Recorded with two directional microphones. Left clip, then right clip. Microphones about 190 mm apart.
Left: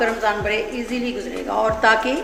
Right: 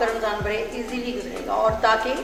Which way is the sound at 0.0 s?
55° left (ahead or behind).